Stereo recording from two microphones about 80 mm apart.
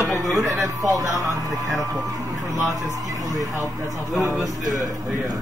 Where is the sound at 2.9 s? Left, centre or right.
Right.